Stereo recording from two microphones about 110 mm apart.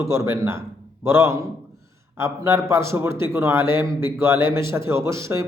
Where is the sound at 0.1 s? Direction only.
25° right (ahead or behind).